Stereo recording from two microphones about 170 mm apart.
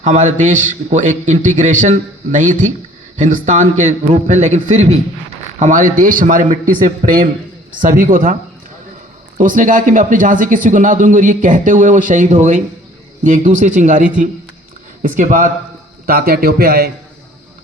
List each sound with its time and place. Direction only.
0.0 s a man's voice: 45° right (ahead or behind)
9.4 s a man's voice: 50° right (ahead or behind)
16.0 s a man's voice: 60° right (ahead or behind)